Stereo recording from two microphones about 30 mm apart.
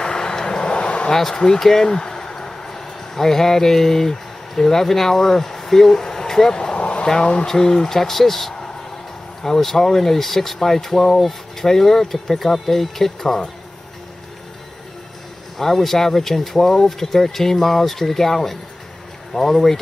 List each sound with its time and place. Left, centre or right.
0.0 s vehicle: left
1.1 s speech: centre
1.9 s a sound: left
2.7 s speech: centre
6.6 s a sound: left
7.2 s speech: left
7.4 s speech: centre
9.6 s speech: centre
15.5 s speech: centre